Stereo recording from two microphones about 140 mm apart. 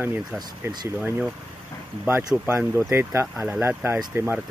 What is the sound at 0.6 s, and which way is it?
Speech, 20° right (ahead or behind).